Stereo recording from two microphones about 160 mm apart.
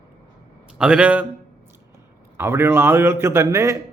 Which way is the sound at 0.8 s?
5° right (ahead or behind).